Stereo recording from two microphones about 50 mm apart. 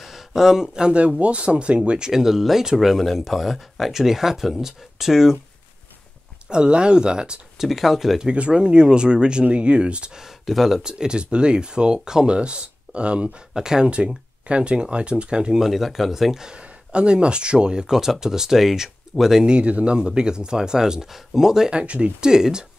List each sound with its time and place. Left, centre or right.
0.0 s speech: centre
6.5 s speech: centre
7.6 s speech: centre
8.3 s speech: centre
10.1 s speech: centre; by 13.3 s right
13.5 s speech: centre
15.6 s speech: centre
19.4 s speech: right
21.7 s speech: right
22.2 s speech: centre